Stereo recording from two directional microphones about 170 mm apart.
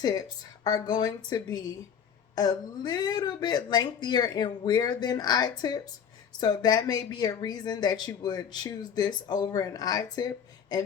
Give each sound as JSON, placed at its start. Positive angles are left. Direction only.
{"t": 0.0, "sound": "speech", "side_deg": 20}